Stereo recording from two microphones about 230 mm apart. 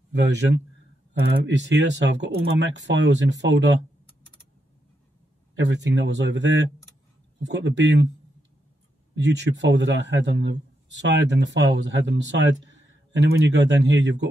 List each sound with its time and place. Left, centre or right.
0.1 s a man's voice: right
5.6 s a man's voice: right